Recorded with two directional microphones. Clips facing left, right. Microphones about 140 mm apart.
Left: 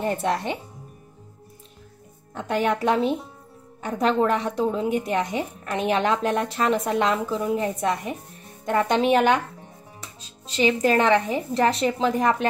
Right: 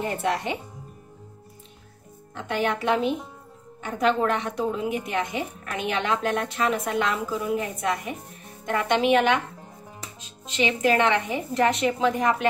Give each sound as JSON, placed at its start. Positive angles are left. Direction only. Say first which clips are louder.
{"t": 2.3, "sound": "a woman's voice", "louder": "left 3 dB", "side_deg": 40}